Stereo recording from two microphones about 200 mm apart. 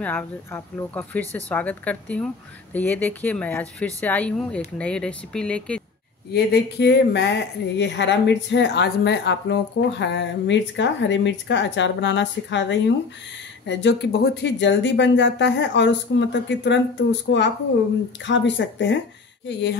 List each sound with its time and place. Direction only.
0.0 s a woman's voice: 10° left (ahead or behind)
6.3 s a woman's voice: 55° left (ahead or behind)